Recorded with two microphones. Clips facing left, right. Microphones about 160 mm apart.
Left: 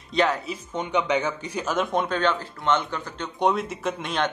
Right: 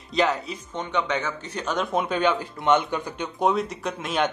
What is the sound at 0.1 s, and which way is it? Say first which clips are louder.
Speech: even; centre (ahead or behind).